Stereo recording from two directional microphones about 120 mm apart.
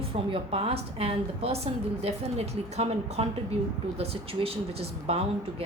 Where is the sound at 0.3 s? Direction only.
50° right (ahead or behind).